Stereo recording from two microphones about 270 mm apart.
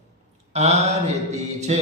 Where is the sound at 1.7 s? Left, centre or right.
Right.